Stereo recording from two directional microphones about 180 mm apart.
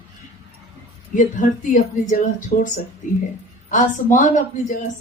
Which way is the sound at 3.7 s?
45° left (ahead or behind).